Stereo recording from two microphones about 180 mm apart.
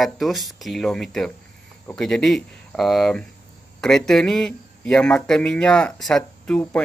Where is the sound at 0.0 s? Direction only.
Centre (ahead or behind).